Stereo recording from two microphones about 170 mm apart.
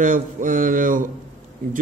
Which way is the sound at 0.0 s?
50° right (ahead or behind).